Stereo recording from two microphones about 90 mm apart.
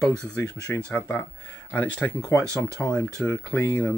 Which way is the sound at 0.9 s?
20° left (ahead or behind).